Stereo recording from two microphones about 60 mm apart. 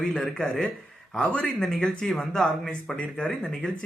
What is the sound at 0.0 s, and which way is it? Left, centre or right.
Speech, centre.